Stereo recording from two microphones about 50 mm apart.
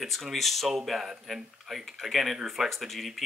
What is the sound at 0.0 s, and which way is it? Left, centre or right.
Speech, centre.